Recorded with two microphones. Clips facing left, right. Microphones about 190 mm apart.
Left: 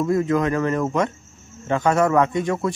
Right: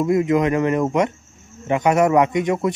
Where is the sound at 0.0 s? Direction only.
15° right (ahead or behind).